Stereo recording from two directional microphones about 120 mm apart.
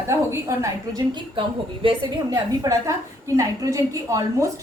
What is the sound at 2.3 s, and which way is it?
A woman's voice, 25° right (ahead or behind).